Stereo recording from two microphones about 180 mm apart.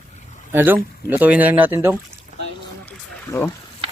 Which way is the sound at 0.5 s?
10° right (ahead or behind).